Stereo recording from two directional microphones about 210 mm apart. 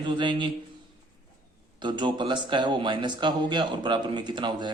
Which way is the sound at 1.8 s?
20° right (ahead or behind).